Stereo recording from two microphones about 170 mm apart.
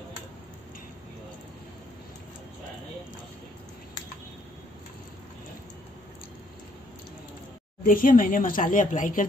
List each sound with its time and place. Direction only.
7.8 s speech: 55° left (ahead or behind)